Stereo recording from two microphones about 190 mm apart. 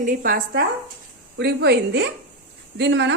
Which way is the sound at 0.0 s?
50° right (ahead or behind).